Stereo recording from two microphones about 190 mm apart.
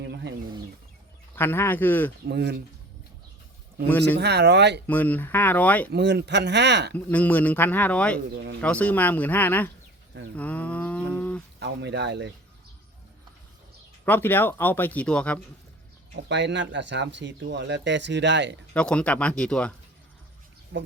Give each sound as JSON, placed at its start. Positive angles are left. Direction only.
{"t": 0.0, "sound": "chicken", "side_deg": -60}
{"t": 1.4, "sound": "speech", "side_deg": 10}
{"t": 2.2, "sound": "speech", "side_deg": -60}
{"t": 3.8, "sound": "speech", "side_deg": 10}
{"t": 4.2, "sound": "speech", "side_deg": -60}
{"t": 4.9, "sound": "speech", "side_deg": 10}
{"t": 5.9, "sound": "speech", "side_deg": -60}
{"t": 6.9, "sound": "speech", "side_deg": 10}
{"t": 10.3, "sound": "livestock", "side_deg": 5}
{"t": 11.1, "sound": "a sound", "side_deg": 5}
{"t": 11.6, "sound": "speech", "side_deg": -65}
{"t": 14.0, "sound": "speech", "side_deg": 10}
{"t": 16.3, "sound": "speech", "side_deg": -70}
{"t": 18.7, "sound": "speech", "side_deg": 5}